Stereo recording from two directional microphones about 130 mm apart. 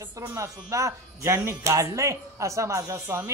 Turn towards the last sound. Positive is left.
turn(degrees=-25)  # may be behind; listen again after turning